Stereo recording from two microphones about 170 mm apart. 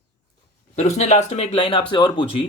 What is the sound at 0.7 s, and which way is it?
A man's voice, 40° left (ahead or behind).